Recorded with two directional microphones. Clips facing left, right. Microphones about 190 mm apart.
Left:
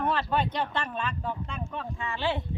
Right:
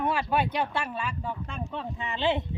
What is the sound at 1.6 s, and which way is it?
Speech, 20° right (ahead or behind).